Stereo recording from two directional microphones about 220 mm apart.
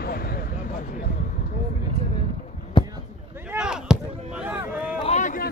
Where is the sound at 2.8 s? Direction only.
20° left (ahead or behind).